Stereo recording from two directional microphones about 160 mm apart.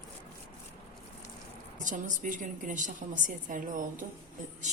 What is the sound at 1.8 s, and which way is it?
A woman's voice, 50° right (ahead or behind).